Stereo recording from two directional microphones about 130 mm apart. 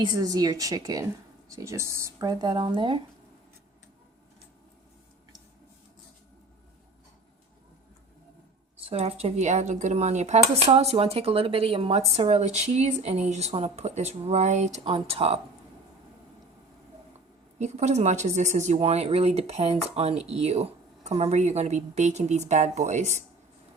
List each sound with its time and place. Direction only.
0.2 s speech: 30° right (ahead or behind)
8.8 s speech: 50° right (ahead or behind)
14.8 s speech: 45° right (ahead or behind)
17.6 s speech: 65° right (ahead or behind)